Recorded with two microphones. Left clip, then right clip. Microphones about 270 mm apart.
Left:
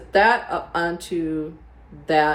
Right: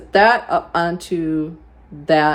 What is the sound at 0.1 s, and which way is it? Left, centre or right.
Speech, right.